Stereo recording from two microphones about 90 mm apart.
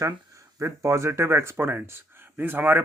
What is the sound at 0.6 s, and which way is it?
Speech, 30° right (ahead or behind).